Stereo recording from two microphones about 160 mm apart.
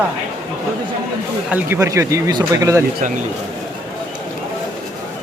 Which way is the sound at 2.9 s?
55° right (ahead or behind).